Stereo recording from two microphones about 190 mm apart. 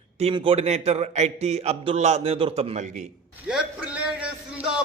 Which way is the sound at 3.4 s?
5° right (ahead or behind).